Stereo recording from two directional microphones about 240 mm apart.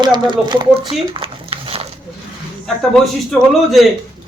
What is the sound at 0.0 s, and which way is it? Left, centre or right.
Speech, centre.